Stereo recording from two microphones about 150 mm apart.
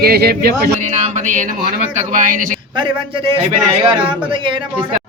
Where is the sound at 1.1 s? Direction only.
60° right (ahead or behind).